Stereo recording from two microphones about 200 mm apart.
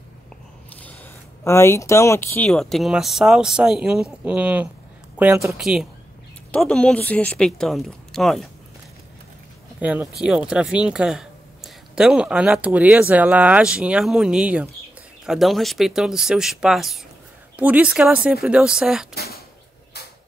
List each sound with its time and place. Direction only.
0.7 s speech: 10° left (ahead or behind)
9.8 s speech: 5° right (ahead or behind)
19.1 s a sound: 50° left (ahead or behind)